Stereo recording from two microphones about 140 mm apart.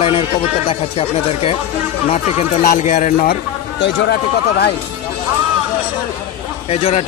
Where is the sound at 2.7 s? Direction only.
65° left (ahead or behind).